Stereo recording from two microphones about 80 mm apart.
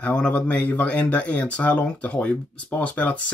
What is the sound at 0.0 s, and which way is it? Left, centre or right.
Speech, centre.